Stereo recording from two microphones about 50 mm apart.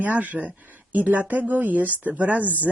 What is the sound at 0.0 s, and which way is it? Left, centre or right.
Speech, right.